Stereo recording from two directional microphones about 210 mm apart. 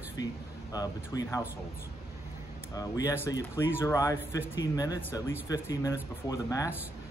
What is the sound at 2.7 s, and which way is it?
Speech, 15° left (ahead or behind).